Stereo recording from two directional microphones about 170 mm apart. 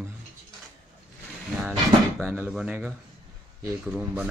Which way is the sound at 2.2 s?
15° right (ahead or behind).